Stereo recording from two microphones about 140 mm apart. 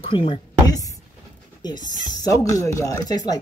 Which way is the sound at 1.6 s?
30° left (ahead or behind).